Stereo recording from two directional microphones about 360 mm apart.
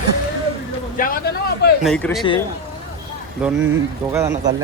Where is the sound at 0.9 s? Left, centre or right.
Left.